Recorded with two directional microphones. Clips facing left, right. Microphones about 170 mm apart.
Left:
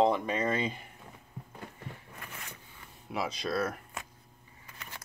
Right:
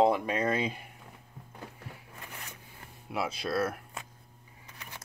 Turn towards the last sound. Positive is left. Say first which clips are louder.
# even
turn(degrees=-15)  # may be behind; listen again after turning